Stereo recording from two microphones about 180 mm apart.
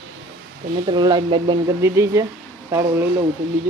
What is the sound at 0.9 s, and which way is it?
Speech, 25° right (ahead or behind).